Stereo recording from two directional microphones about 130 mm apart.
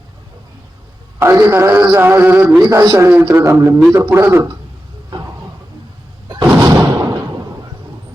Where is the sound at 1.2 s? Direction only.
20° right (ahead or behind).